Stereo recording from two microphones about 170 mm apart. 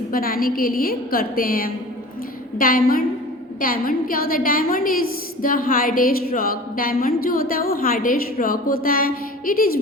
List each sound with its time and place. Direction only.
0.1 s a woman's voice: 60° left (ahead or behind)